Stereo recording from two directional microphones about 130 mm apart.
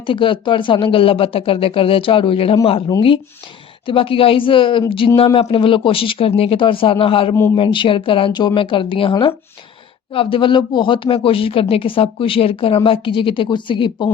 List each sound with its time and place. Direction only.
0.0 s speech: 40° left (ahead or behind)
3.8 s speech: 45° left (ahead or behind)